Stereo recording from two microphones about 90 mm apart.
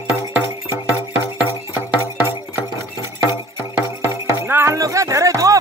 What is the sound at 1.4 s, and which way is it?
Music, 20° right (ahead or behind).